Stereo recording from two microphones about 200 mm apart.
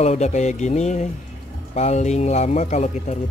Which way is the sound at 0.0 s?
35° left (ahead or behind).